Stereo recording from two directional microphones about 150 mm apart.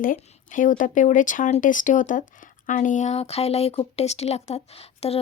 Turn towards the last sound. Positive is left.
turn(degrees=40)  # may be behind; listen again after turning